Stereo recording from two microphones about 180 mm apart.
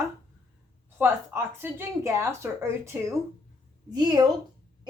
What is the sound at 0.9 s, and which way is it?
A woman's voice, 10° right (ahead or behind).